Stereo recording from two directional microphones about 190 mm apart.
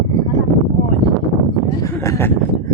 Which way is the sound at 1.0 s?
20° left (ahead or behind).